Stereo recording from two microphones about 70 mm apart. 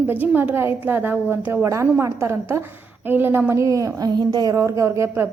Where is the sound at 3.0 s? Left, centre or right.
Right.